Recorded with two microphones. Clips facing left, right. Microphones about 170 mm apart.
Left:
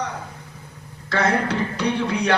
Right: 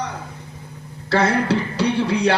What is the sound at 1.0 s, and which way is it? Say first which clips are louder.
Speech: right 3 dB; 30° right (ahead or behind).